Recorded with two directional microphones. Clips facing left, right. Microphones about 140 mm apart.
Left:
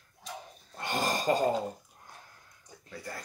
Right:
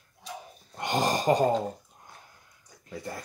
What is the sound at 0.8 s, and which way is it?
Speech, 20° right (ahead or behind).